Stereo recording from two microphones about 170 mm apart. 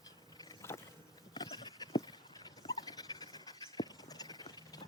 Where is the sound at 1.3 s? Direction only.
25° left (ahead or behind).